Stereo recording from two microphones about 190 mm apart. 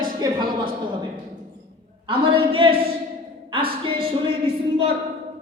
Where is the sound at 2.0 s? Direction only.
25° right (ahead or behind).